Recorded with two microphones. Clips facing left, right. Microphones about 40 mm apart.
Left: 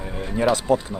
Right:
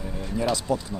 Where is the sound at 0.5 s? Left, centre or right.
Left.